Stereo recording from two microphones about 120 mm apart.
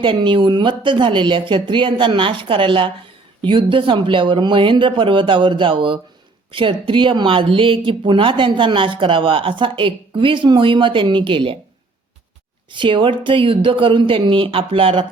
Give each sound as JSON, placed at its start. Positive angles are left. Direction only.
{"t": 0.0, "sound": "speech", "side_deg": -45}
{"t": 12.7, "sound": "speech", "side_deg": -45}